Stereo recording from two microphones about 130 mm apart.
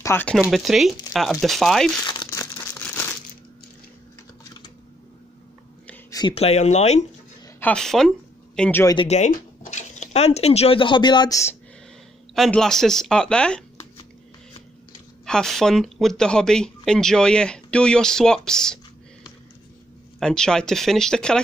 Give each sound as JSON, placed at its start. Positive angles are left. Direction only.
{"t": 0.0, "sound": "speech", "side_deg": 20}
{"t": 0.4, "sound": "speech", "side_deg": 0}
{"t": 2.0, "sound": "crumpling", "side_deg": 30}
{"t": 6.0, "sound": "a sound", "side_deg": 30}
{"t": 6.3, "sound": "speech", "side_deg": 55}
{"t": 7.6, "sound": "a man's voice", "side_deg": 5}
{"t": 9.0, "sound": "speech", "side_deg": 60}
{"t": 12.4, "sound": "speech", "side_deg": 5}
{"t": 15.2, "sound": "speech", "side_deg": 5}
{"t": 20.2, "sound": "speech", "side_deg": 5}